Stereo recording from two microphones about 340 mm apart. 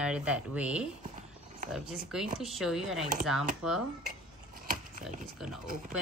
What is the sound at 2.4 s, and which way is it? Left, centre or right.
Speech, centre.